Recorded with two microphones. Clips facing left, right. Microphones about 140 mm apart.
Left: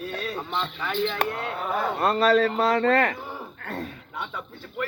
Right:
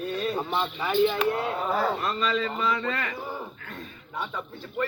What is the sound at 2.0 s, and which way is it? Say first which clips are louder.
Speech: left 7 dB; 65° left (ahead or behind).